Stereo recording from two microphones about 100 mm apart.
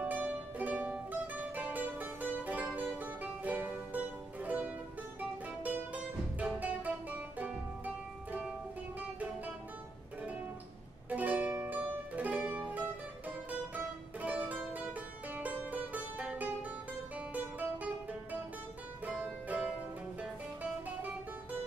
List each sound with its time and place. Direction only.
0.0 s music: 15° right (ahead or behind)
6.4 s music: 15° right (ahead or behind)
11.1 s music: 15° right (ahead or behind)